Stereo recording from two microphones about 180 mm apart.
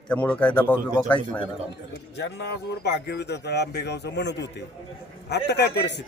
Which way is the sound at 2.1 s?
70° left (ahead or behind).